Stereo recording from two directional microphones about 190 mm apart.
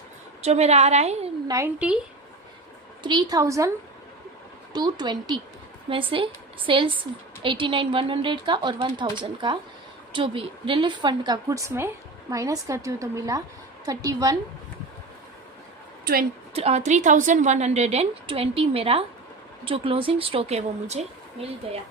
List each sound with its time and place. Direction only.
0.4 s a woman's voice: 35° right (ahead or behind)
1.5 s a woman's voice: 10° right (ahead or behind)
3.0 s a woman's voice: 25° right (ahead or behind)
4.7 s a woman's voice: 20° right (ahead or behind)
16.6 s a woman's voice: 35° right (ahead or behind)